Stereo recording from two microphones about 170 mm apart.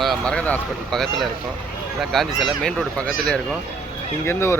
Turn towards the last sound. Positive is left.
turn(degrees=15)  # may be behind; listen again after turning